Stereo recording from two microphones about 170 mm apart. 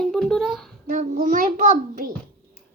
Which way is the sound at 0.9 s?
50° right (ahead or behind).